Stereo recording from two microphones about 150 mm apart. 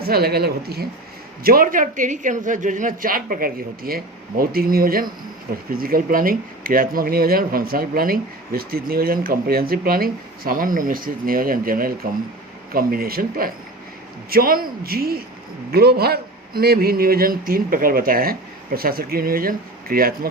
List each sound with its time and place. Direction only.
0.0 s a man's voice: 90° right
1.5 s a man's voice: 70° right (ahead or behind)